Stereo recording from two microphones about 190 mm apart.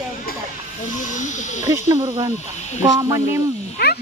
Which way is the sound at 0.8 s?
40° left (ahead or behind).